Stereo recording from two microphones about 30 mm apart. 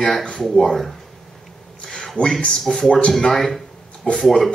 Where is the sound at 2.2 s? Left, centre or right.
Left.